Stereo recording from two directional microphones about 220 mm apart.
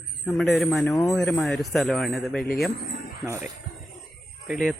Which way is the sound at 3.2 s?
15° right (ahead or behind).